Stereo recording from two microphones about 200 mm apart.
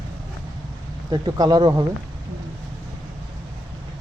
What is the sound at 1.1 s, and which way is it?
Speech, 20° right (ahead or behind).